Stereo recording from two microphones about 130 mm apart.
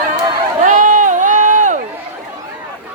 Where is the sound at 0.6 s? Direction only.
80° right.